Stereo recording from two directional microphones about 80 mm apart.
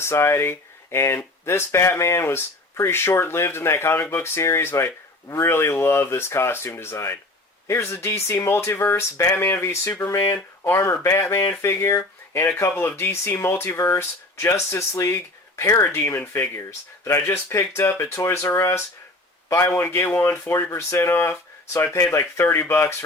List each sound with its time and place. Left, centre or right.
0.0 s speech: left